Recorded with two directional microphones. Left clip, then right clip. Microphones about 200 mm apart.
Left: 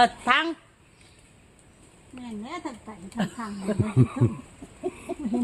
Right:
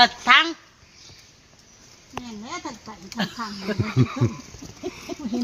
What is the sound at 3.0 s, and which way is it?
Speech, 30° left (ahead or behind).